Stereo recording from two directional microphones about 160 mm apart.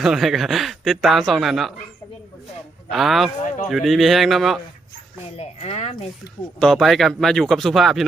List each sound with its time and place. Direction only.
0.0 s speech: centre (ahead or behind)
2.9 s speech: centre (ahead or behind)
5.4 s speech: 40° left (ahead or behind)
6.6 s speech: 5° left (ahead or behind)